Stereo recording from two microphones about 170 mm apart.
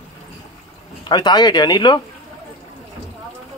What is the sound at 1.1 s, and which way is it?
Speech, 25° left (ahead or behind).